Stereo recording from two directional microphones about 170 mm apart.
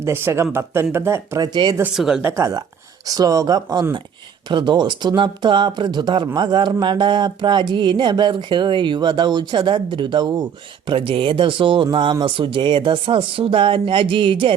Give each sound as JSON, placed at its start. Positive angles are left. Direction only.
{"t": 0.0, "sound": "speech", "side_deg": -15}
{"t": 1.5, "sound": "speech", "side_deg": -30}
{"t": 1.8, "sound": "speech", "side_deg": -5}
{"t": 2.3, "sound": "speech", "side_deg": -20}